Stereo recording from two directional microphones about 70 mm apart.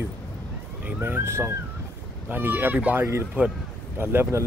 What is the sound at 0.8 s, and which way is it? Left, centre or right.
Speech, right.